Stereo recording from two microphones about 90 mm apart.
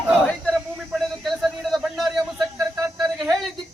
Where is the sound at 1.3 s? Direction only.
Centre (ahead or behind).